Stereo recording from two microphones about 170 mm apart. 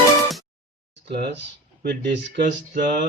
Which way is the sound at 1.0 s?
80° right.